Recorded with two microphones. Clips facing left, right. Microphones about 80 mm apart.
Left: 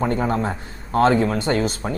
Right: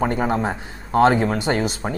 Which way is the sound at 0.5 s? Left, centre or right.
Centre.